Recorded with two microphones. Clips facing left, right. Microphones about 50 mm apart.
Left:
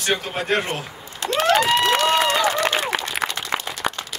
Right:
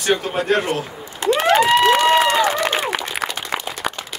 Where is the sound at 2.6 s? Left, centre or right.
Centre.